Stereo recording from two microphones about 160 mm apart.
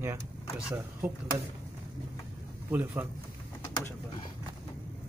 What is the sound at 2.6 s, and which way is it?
Speech, 10° right (ahead or behind).